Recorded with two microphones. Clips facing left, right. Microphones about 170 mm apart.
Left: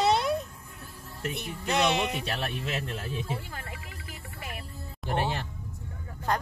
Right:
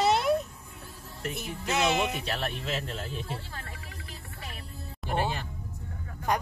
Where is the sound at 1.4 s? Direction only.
5° right (ahead or behind).